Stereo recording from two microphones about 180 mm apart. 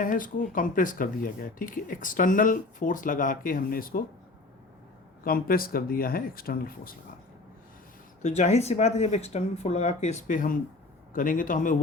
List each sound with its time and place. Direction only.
0.0 s speech: 50° left (ahead or behind)
5.2 s speech: 55° left (ahead or behind)
8.2 s speech: 40° left (ahead or behind)